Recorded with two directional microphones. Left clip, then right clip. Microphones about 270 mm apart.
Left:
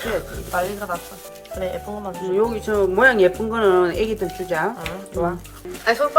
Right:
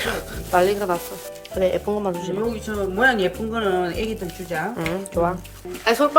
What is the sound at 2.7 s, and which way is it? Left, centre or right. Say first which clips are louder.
Speech: left 3 dB; centre.